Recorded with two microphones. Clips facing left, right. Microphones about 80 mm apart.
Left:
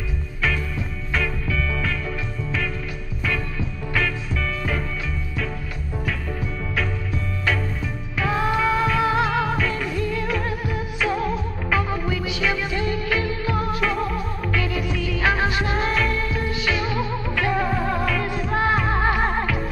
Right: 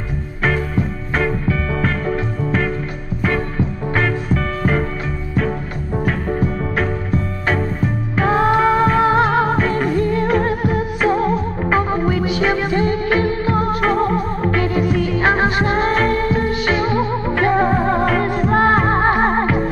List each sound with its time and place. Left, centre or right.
0.4 s music: right
6.0 s music: right